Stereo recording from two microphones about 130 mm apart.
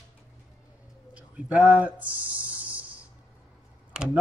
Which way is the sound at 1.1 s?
10° right (ahead or behind).